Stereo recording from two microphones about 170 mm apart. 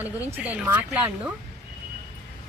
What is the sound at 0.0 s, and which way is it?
Speech, 10° right (ahead or behind).